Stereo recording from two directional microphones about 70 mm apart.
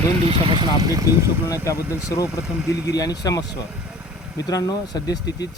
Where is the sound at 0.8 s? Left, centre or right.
Right.